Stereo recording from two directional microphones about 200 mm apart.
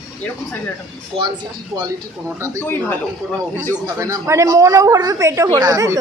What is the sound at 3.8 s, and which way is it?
Speech, 15° right (ahead or behind).